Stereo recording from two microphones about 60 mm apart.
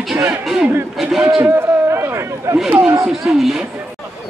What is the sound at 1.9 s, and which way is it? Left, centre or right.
Chatter, right.